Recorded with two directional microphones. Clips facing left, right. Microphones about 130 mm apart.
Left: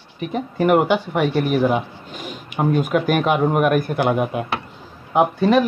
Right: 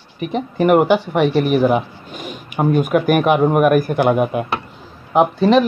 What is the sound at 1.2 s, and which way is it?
Speech, 70° right (ahead or behind).